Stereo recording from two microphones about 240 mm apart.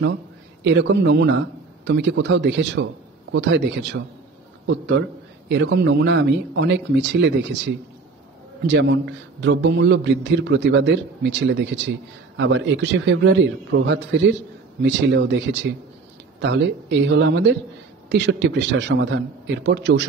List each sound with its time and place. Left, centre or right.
0.7 s a man's voice: right